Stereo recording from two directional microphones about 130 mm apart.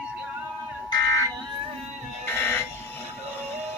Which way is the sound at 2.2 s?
15° left (ahead or behind).